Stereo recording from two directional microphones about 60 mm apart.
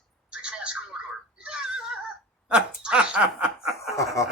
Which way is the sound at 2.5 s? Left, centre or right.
Centre.